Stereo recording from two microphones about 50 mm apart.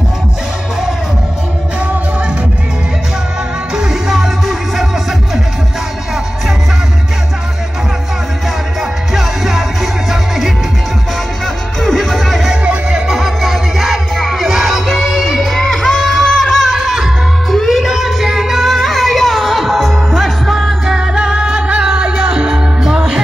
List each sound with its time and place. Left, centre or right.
3.7 s music: centre
9.1 s music: centre
11.4 s music: centre
12.6 s music: centre
13.2 s music: centre
15.5 s music: centre
20.9 s music: centre